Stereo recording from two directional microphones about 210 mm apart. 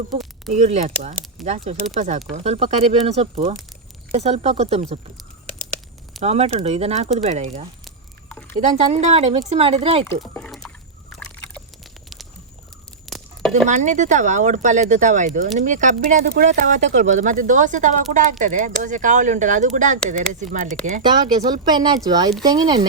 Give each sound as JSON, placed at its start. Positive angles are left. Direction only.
{"t": 0.5, "sound": "speech", "side_deg": -35}
{"t": 6.2, "sound": "speech", "side_deg": -30}
{"t": 7.9, "sound": "a sound", "side_deg": 5}
{"t": 8.7, "sound": "speech", "side_deg": -35}
{"t": 10.3, "sound": "a sound", "side_deg": 0}
{"t": 11.4, "sound": "biting", "side_deg": 0}
{"t": 13.1, "sound": "a sound", "side_deg": 0}
{"t": 13.7, "sound": "speech", "side_deg": -35}
{"t": 21.5, "sound": "speech", "side_deg": -20}